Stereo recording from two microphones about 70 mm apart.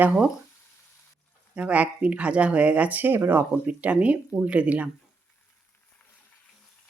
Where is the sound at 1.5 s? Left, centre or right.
Centre.